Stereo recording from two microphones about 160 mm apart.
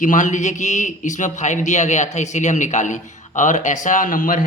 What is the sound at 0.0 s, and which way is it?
A man's voice, 55° left (ahead or behind).